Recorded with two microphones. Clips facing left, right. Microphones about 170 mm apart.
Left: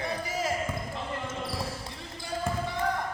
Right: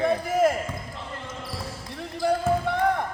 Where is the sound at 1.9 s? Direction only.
60° right (ahead or behind).